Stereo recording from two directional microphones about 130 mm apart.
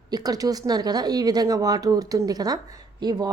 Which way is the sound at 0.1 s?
30° right (ahead or behind).